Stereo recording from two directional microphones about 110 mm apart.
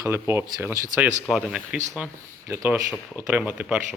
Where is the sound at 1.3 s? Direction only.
5° right (ahead or behind).